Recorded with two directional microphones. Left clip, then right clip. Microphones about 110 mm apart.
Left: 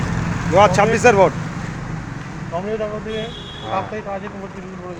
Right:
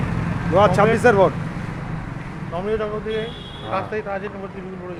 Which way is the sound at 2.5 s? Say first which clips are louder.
Even; 40° right (ahead or behind).